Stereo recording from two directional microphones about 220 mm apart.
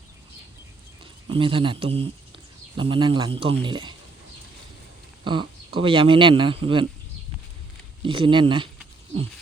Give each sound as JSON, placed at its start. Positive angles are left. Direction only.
{"t": 1.3, "sound": "speech", "side_deg": -25}
{"t": 5.2, "sound": "speech", "side_deg": -20}
{"t": 8.0, "sound": "speech", "side_deg": -25}